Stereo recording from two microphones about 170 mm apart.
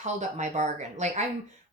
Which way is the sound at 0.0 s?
45° right (ahead or behind).